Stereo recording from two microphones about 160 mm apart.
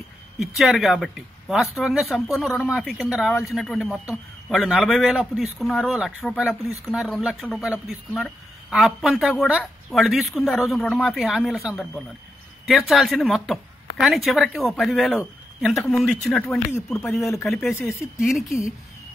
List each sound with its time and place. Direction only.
0.6 s a man's voice: centre (ahead or behind)
16.7 s speech: 15° left (ahead or behind)
18.2 s a man's voice: centre (ahead or behind)